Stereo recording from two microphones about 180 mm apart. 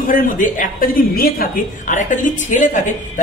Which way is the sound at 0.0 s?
50° left (ahead or behind).